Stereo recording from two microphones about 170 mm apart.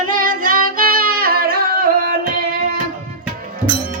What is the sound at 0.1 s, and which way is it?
Singing, 55° right (ahead or behind).